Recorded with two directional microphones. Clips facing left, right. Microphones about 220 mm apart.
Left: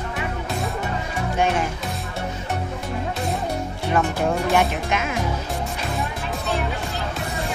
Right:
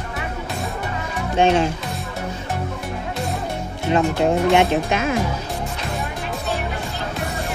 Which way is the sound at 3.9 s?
25° right (ahead or behind).